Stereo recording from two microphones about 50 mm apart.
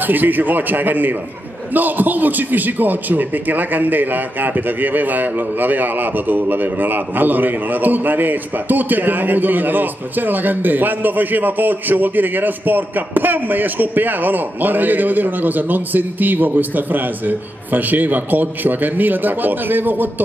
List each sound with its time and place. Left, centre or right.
0.0 s a man's voice: right